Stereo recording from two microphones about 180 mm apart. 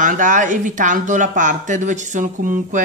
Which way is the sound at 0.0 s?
45° right (ahead or behind).